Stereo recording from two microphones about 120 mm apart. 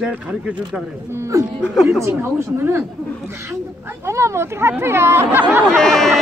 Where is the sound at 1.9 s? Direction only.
20° right (ahead or behind).